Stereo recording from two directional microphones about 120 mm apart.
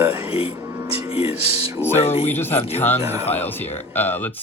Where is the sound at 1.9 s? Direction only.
60° left (ahead or behind).